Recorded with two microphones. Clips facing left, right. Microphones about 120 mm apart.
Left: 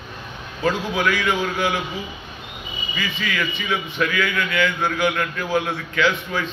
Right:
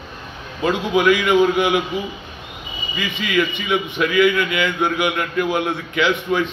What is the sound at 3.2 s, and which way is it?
A man's voice, 20° right (ahead or behind).